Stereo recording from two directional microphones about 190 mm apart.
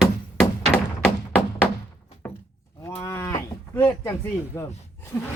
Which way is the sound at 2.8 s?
15° left (ahead or behind).